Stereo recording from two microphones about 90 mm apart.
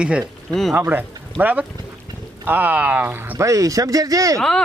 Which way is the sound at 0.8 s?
20° right (ahead or behind).